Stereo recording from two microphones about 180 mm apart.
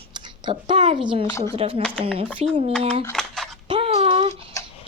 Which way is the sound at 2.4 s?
35° right (ahead or behind).